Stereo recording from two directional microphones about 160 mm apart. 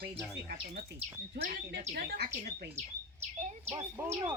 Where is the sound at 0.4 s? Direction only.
75° right (ahead or behind).